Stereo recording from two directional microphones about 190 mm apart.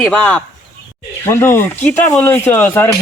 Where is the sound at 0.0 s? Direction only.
5° left (ahead or behind).